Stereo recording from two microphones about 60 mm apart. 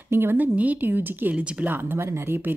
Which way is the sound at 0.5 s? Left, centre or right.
Right.